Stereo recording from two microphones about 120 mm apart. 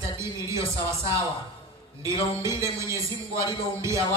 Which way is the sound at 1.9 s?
25° right (ahead or behind).